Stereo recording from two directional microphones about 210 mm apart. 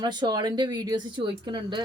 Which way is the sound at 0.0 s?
20° right (ahead or behind).